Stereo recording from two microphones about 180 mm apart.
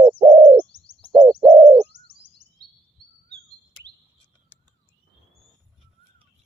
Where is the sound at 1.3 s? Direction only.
5° right (ahead or behind).